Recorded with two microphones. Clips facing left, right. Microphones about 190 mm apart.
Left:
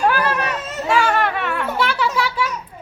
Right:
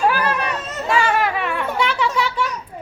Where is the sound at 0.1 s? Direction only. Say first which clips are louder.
Left 1 dB; centre (ahead or behind).